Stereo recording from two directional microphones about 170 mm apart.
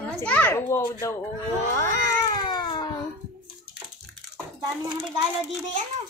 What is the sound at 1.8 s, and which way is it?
Cat, 20° left (ahead or behind).